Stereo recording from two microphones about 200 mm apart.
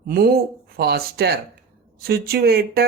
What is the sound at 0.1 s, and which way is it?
Speech, 50° right (ahead or behind).